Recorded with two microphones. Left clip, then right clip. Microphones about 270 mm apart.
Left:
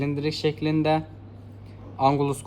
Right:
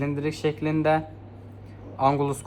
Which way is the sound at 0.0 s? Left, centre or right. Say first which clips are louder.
Left 1 dB; left.